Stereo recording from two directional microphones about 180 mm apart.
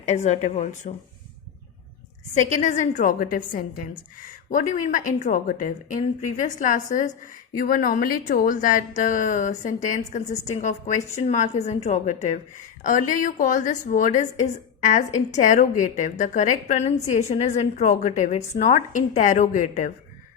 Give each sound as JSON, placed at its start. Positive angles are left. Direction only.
{"t": 0.0, "sound": "a woman's voice", "side_deg": 40}
{"t": 2.3, "sound": "a woman's voice", "side_deg": 45}